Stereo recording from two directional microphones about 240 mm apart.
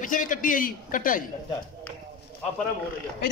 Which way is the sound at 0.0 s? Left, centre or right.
Left.